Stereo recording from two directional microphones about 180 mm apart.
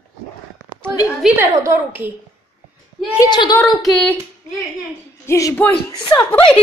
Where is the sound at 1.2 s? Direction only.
Centre (ahead or behind).